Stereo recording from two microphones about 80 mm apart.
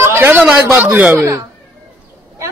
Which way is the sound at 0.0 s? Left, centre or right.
Right.